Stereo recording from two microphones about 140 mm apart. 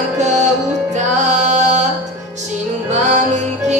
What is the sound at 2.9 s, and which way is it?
Music, 55° right (ahead or behind).